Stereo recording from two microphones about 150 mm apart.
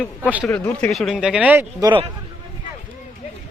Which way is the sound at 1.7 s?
25° right (ahead or behind).